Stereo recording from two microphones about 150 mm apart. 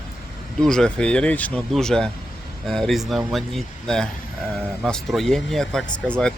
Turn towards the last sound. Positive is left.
turn(degrees=5)  # may be behind; listen again after turning